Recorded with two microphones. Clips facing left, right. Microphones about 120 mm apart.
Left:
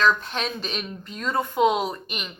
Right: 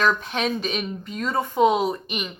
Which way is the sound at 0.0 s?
10° right (ahead or behind).